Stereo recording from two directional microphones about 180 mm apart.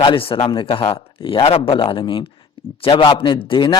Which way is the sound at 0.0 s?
30° left (ahead or behind).